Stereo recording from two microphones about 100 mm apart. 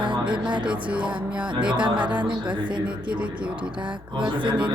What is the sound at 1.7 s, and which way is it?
Speech, 50° right (ahead or behind).